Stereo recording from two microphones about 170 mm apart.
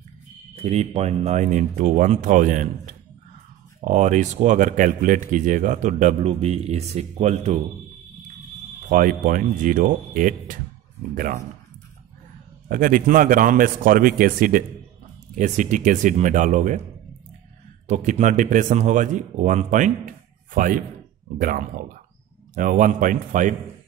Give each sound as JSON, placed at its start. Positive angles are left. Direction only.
{"t": 0.6, "sound": "speech", "side_deg": -40}
{"t": 8.8, "sound": "speech", "side_deg": -50}
{"t": 12.6, "sound": "a man's voice", "side_deg": -55}
{"t": 17.8, "sound": "a man's voice", "side_deg": -45}